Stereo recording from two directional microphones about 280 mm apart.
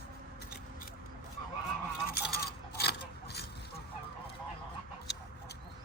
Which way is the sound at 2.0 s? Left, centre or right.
Left.